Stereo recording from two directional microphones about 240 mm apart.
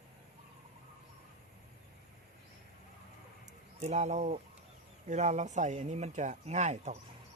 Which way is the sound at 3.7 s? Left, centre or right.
Right.